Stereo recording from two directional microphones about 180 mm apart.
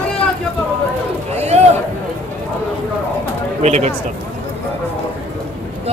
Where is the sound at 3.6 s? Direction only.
40° right (ahead or behind).